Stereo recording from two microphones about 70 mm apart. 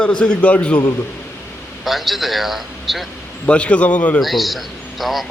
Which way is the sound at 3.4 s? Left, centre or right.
Centre.